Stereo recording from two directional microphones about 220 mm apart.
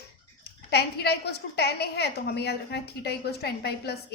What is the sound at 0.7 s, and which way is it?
A woman's voice, 45° left (ahead or behind).